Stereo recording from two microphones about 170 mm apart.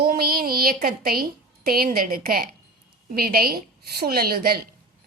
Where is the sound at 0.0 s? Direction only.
65° right (ahead or behind).